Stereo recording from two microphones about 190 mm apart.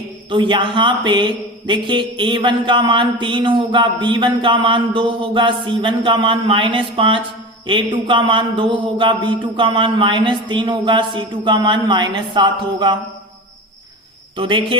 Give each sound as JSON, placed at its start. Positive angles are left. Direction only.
{"t": 0.3, "sound": "speech", "side_deg": -25}
{"t": 14.3, "sound": "speech", "side_deg": -25}